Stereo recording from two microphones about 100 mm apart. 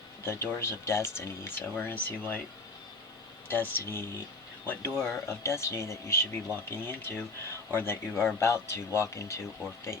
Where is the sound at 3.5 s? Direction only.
20° left (ahead or behind).